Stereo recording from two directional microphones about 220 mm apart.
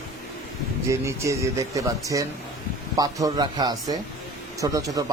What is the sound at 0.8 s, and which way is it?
Speech, 15° right (ahead or behind).